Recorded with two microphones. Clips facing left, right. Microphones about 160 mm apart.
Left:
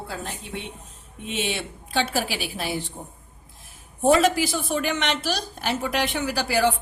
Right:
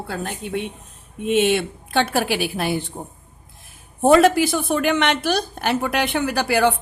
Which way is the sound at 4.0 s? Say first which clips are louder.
Right 5 dB; 55° right (ahead or behind).